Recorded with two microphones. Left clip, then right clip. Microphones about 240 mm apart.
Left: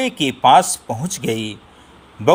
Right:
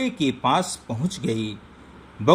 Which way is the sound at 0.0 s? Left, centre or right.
Left.